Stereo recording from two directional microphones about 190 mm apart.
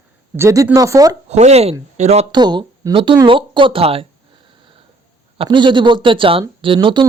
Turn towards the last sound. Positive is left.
turn(degrees=-25)  # may be behind; listen again after turning